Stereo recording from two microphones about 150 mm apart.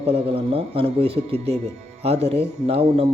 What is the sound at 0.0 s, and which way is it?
A man's voice, 40° right (ahead or behind).